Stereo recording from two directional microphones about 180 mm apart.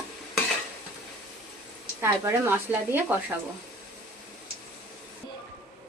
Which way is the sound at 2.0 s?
15° right (ahead or behind).